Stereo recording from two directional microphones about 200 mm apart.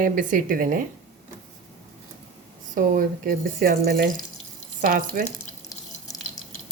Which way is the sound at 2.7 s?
40° right (ahead or behind).